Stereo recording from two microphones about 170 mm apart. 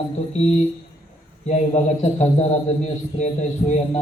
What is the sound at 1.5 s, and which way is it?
A man's voice, 45° left (ahead or behind).